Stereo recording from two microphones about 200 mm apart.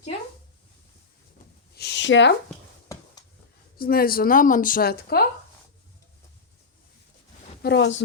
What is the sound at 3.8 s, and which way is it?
A woman's voice, 45° left (ahead or behind).